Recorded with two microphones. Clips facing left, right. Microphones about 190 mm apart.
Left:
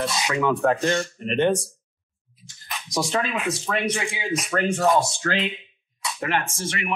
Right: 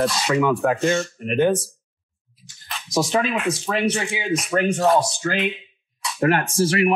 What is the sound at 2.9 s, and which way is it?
Speech, 20° right (ahead or behind).